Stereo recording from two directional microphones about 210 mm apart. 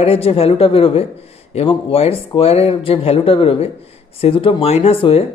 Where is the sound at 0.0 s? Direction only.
30° left (ahead or behind).